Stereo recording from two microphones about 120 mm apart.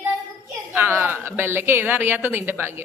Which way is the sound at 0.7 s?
20° right (ahead or behind).